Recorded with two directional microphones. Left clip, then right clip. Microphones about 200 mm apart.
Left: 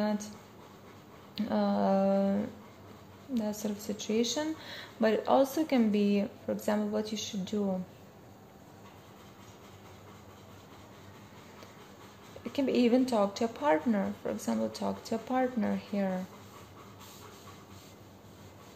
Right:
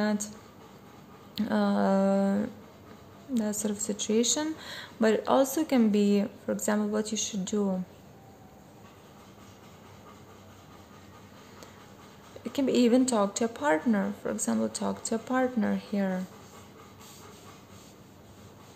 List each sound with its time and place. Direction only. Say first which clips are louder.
0.0 s speech: right 3 dB; 25° right (ahead or behind)
1.3 s speech: right 2 dB; 25° right (ahead or behind)
12.5 s speech: right 3 dB; 20° right (ahead or behind)